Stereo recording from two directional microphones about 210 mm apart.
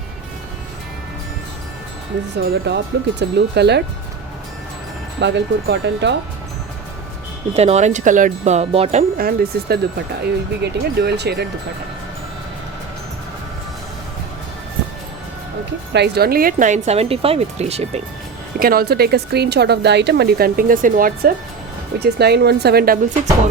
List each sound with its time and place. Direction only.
2.3 s speech: 50° right (ahead or behind)
5.2 s speech: 55° right (ahead or behind)
7.5 s speech: 30° right (ahead or behind); by 11.4 s 50° right (ahead or behind)
15.9 s speech: 50° right (ahead or behind); by 18.0 s 30° right (ahead or behind)
18.6 s speech: 45° right (ahead or behind)